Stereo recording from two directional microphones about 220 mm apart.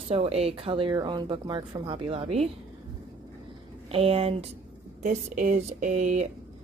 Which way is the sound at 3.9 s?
25° right (ahead or behind).